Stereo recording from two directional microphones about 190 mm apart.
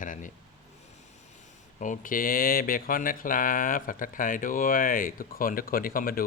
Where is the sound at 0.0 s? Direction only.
45° left (ahead or behind).